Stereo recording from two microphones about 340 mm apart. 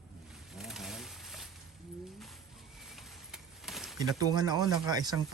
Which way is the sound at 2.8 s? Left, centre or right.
Centre.